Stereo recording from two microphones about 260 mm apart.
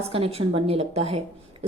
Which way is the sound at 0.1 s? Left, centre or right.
Right.